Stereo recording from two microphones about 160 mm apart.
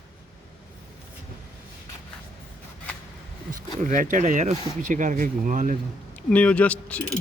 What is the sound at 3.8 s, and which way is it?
Speech, 50° right (ahead or behind).